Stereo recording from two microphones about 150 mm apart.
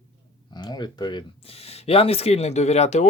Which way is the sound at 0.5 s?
30° left (ahead or behind).